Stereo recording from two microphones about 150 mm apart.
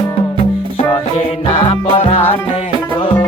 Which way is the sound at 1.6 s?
40° left (ahead or behind).